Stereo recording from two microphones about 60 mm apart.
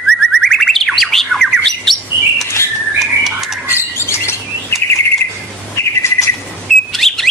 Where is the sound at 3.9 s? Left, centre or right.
Left.